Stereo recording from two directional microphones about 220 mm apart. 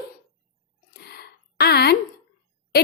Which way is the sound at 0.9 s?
45° left (ahead or behind).